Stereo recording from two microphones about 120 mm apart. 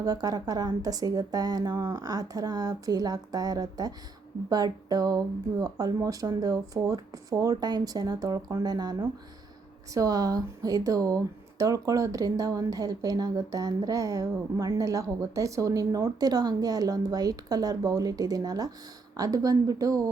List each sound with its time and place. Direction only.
0.0 s speech: 30° right (ahead or behind)